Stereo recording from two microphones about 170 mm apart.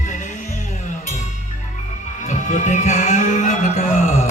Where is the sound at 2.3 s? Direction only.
45° left (ahead or behind).